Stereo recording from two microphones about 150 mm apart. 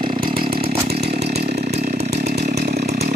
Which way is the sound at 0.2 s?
75° right (ahead or behind).